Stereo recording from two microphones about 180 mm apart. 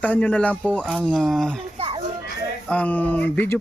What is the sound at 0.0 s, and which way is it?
Speech, 10° left (ahead or behind).